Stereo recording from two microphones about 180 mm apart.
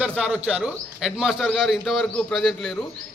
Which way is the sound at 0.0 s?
5° right (ahead or behind).